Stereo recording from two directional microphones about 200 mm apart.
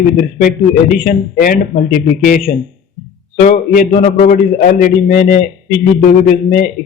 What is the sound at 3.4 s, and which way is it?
A man's voice, 40° left (ahead or behind).